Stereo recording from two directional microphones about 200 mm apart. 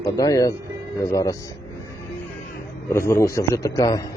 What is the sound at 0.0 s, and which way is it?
A man's voice, 15° left (ahead or behind).